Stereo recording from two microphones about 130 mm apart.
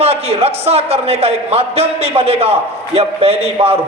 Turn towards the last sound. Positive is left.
turn(degrees=-50)  # may be behind; listen again after turning